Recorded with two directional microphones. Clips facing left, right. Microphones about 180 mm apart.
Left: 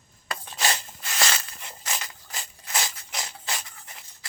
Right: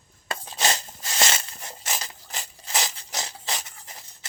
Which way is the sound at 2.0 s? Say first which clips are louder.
Right 2 dB; 35° right (ahead or behind).